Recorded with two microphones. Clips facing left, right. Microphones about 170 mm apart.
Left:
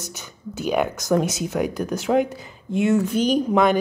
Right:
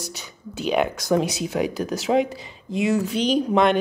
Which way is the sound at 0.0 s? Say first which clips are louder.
Even; 65° right (ahead or behind).